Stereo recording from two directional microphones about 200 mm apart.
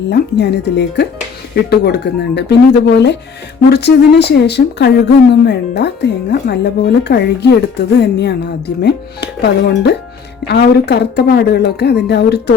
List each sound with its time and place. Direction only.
0.1 s speech: 55° left (ahead or behind)